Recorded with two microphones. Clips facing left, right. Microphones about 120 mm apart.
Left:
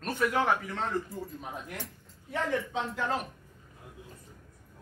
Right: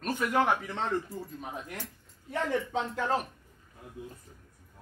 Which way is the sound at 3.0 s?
35° right (ahead or behind).